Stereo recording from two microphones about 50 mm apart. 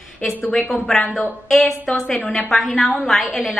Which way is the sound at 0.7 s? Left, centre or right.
Centre.